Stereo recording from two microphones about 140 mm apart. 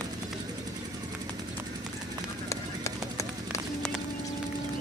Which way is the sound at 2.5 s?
20° left (ahead or behind).